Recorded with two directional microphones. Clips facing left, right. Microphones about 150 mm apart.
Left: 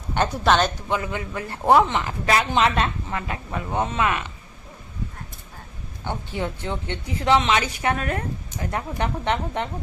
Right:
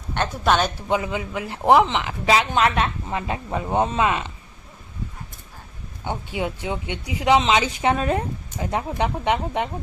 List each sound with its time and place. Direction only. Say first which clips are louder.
0.4 s speech: even; 5° right (ahead or behind)
0.9 s speech: right 3 dB; 20° right (ahead or behind); by 2.9 s centre (ahead or behind)
3.1 s a woman's voice: right 3 dB; 20° right (ahead or behind)
6.1 s a woman's voice: right 2 dB; 10° right (ahead or behind)